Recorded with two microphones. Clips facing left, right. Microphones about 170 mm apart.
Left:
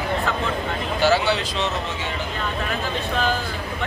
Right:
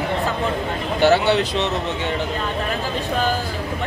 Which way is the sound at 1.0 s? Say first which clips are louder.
Right 4 dB; 60° right (ahead or behind).